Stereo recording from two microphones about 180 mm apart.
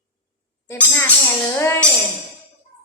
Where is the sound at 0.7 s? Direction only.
10° left (ahead or behind).